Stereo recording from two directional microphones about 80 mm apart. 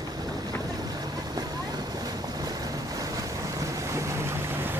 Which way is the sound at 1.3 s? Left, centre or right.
Right.